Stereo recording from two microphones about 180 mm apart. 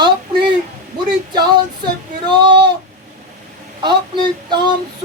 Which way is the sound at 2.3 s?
25° right (ahead or behind).